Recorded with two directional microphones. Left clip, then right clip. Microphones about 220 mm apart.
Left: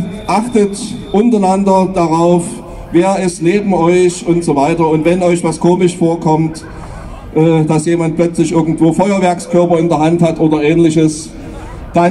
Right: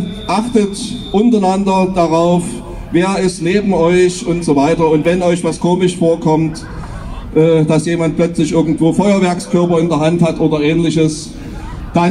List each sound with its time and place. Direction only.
0.3 s music: 50° left (ahead or behind)
1.1 s a man's voice: 50° left (ahead or behind)